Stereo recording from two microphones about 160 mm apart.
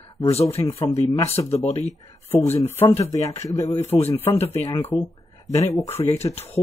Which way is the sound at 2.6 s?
15° left (ahead or behind).